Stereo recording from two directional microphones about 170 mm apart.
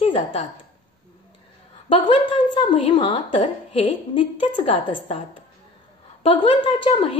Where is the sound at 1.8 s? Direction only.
30° left (ahead or behind).